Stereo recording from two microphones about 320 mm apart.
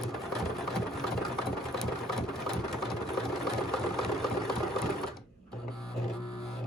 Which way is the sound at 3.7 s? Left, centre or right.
Centre.